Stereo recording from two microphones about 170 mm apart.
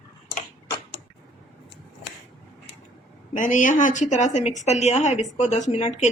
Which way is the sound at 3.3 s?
50° left (ahead or behind).